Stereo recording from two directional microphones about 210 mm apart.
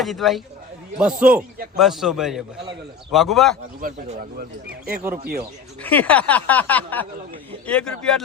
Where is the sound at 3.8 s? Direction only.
35° right (ahead or behind).